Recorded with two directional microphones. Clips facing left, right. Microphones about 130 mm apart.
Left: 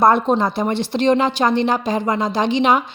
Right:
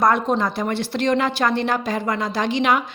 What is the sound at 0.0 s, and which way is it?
Speech, 25° left (ahead or behind).